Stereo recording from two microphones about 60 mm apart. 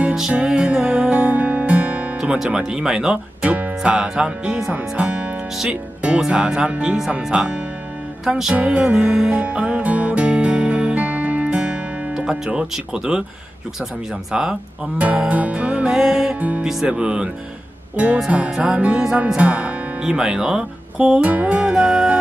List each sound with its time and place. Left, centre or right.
0.3 s music: centre
2.1 s speech: centre
4.7 s speech: right
9.0 s music: centre
12.3 s speech: centre
14.3 s speech: centre
15.0 s speech: right; by 16.3 s centre
16.3 s speech: right
21.2 s speech: right
21.7 s music: centre